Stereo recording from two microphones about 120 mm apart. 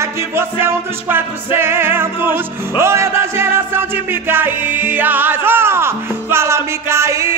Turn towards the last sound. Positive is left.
turn(degrees=-25)  # may be behind; listen again after turning